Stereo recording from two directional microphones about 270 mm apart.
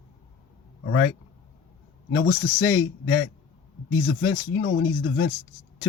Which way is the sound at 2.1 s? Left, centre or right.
Left.